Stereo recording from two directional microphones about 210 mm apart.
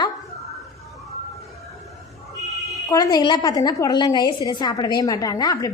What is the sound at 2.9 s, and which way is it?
A woman's voice, 20° left (ahead or behind).